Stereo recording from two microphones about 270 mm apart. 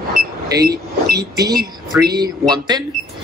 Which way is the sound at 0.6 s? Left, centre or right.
Right.